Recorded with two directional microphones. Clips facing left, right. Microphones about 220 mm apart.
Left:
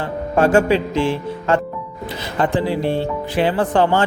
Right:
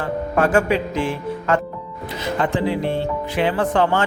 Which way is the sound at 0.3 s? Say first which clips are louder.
Left 3 dB; 30° left (ahead or behind).